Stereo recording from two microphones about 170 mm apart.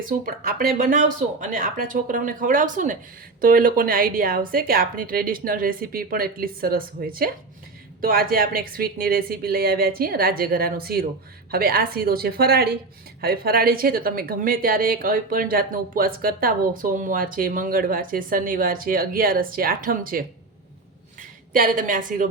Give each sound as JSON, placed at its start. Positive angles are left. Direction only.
{"t": 0.1, "sound": "a woman's voice", "side_deg": -55}